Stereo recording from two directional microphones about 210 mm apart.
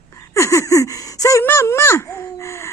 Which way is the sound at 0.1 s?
15° left (ahead or behind).